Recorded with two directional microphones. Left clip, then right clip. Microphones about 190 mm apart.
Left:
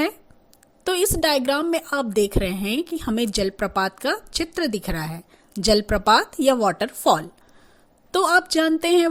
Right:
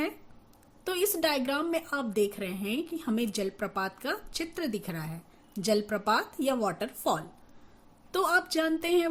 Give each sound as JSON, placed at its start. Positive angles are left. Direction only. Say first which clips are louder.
{"t": 0.9, "sound": "a woman's voice", "louder": "left 8 dB", "side_deg": 40}